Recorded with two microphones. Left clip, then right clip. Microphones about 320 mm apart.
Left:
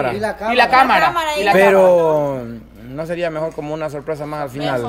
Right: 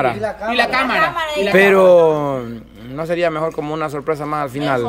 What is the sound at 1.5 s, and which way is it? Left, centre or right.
Speech, centre.